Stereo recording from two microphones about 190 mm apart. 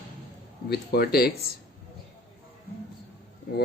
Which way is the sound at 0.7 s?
55° left (ahead or behind).